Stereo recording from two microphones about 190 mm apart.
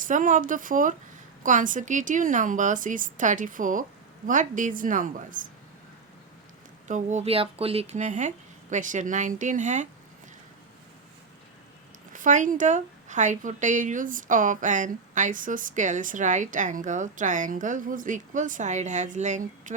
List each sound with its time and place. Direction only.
0.0 s a woman's voice: 45° right (ahead or behind)
6.8 s a woman's voice: 40° right (ahead or behind)
12.1 s a woman's voice: 40° right (ahead or behind)